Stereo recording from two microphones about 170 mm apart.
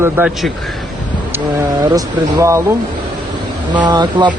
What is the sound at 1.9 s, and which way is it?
Speech, 20° right (ahead or behind).